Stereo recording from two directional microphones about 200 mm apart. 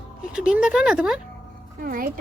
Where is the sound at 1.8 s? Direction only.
45° right (ahead or behind).